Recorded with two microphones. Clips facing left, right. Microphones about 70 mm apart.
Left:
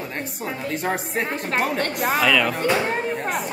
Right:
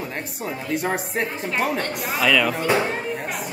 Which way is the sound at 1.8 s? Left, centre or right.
Left.